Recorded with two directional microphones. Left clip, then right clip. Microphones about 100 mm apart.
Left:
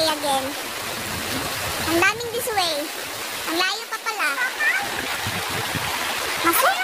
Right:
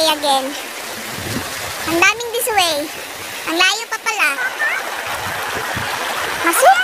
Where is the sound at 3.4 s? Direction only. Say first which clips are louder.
Right 8 dB; 30° right (ahead or behind).